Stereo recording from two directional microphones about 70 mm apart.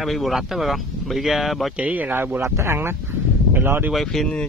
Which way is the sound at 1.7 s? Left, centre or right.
Right.